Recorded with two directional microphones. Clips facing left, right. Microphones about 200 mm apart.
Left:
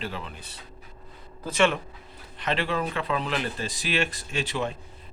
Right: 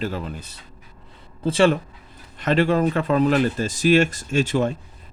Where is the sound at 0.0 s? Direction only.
45° right (ahead or behind).